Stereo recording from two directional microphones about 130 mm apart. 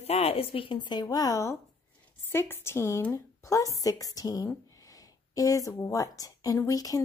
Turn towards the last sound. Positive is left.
turn(degrees=25)  # may be behind; listen again after turning